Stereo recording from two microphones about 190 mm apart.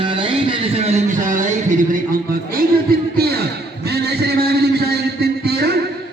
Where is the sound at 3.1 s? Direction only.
55° right (ahead or behind).